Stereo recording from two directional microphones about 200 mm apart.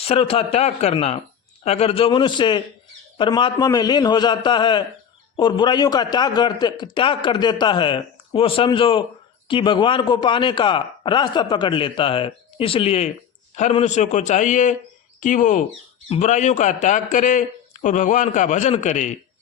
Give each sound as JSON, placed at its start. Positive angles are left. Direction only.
{"t": 0.0, "sound": "a man's voice", "side_deg": 30}